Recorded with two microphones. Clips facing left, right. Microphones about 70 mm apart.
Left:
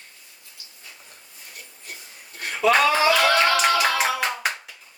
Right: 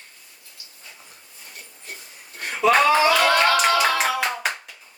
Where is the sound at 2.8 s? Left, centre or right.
Centre.